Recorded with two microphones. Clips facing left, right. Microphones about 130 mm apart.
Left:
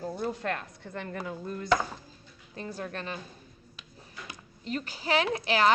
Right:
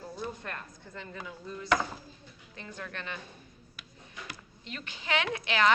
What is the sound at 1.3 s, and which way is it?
Speech, 50° left (ahead or behind).